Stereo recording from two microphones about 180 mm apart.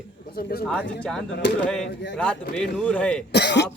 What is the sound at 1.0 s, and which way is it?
Speech, 5° left (ahead or behind).